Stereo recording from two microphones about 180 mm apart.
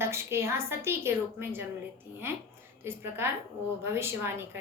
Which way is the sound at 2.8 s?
15° right (ahead or behind).